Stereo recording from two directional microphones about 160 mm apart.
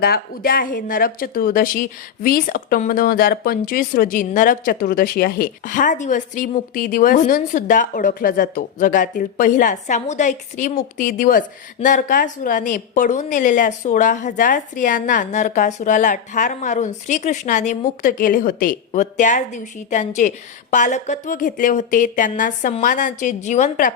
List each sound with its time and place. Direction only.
0.0 s speech: 70° left (ahead or behind); by 23.9 s 55° left (ahead or behind)